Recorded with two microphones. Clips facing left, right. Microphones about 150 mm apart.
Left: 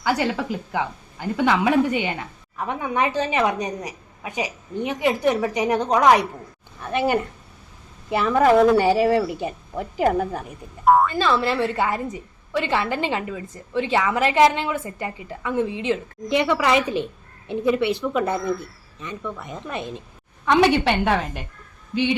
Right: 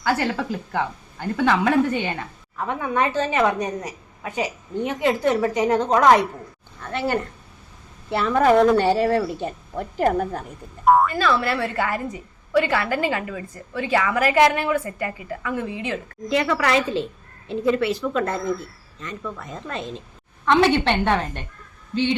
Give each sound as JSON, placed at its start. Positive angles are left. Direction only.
{"t": 0.0, "sound": "a woman's voice", "side_deg": 15}
{"t": 11.1, "sound": "a woman's voice", "side_deg": 25}